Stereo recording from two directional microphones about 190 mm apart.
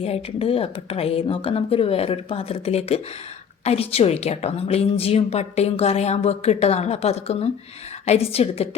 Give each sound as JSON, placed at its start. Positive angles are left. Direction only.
{"t": 0.0, "sound": "a woman's voice", "side_deg": 30}